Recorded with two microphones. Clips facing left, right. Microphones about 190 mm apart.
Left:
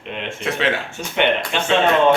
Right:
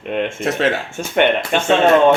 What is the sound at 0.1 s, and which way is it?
Speech, 50° right (ahead or behind).